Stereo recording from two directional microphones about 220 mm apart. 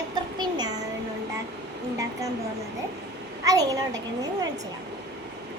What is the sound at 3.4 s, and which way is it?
Speech, 15° right (ahead or behind).